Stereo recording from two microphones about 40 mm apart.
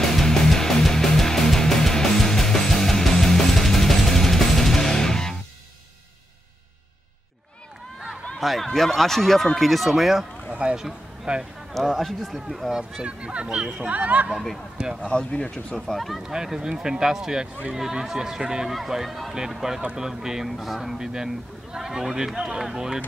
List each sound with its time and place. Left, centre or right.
0.0 s music: centre
8.4 s speech: centre
10.5 s speech: right
11.7 s speech: centre
13.0 s speech: right
14.8 s speech: right
15.0 s speech: left
15.9 s speech: centre
16.2 s speech: centre
18.7 s speech: centre
20.4 s speech: centre
21.0 s speech: centre